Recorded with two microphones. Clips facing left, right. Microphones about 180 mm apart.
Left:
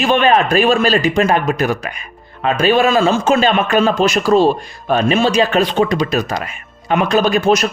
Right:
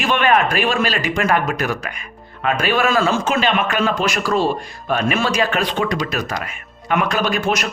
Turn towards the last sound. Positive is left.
turn(degrees=30)  # may be behind; listen again after turning